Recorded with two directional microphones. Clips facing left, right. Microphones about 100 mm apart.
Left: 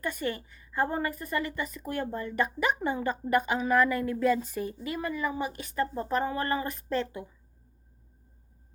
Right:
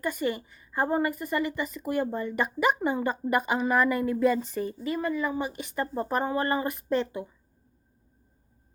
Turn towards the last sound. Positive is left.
turn(degrees=-10)  # may be behind; listen again after turning